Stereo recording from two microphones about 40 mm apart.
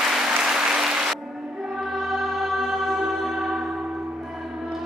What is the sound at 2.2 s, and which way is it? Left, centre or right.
Music, centre.